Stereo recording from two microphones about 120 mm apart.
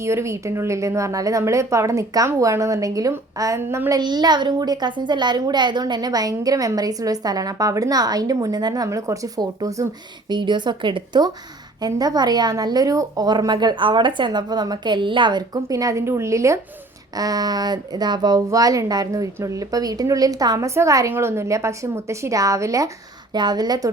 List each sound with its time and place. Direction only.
0.0 s a woman's voice: 25° right (ahead or behind)